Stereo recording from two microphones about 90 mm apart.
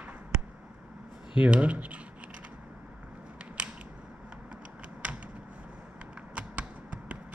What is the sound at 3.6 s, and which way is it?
Scissors, 15° right (ahead or behind).